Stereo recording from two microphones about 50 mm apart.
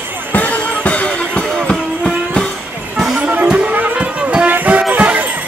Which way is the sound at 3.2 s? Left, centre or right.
Right.